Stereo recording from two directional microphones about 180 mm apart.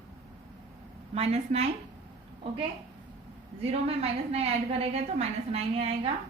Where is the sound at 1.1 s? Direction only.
35° right (ahead or behind).